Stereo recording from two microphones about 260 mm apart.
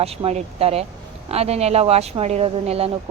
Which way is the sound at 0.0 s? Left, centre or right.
Right.